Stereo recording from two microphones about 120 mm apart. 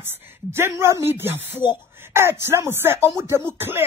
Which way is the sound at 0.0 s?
20° right (ahead or behind).